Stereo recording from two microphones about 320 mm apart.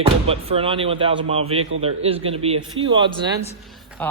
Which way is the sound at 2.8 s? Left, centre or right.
Right.